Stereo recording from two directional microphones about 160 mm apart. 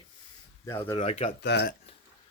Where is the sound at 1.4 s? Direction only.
90° left.